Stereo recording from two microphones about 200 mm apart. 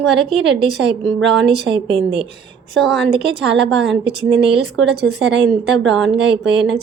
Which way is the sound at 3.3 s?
60° right (ahead or behind).